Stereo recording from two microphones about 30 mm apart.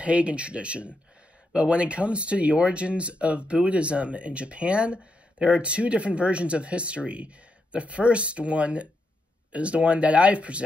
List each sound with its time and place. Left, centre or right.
0.0 s speech: right